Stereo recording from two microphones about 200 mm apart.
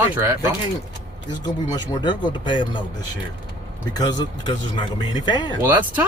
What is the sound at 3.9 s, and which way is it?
Speech, 20° left (ahead or behind).